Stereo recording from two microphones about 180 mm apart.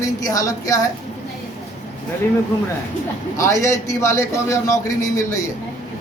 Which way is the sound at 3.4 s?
15° left (ahead or behind).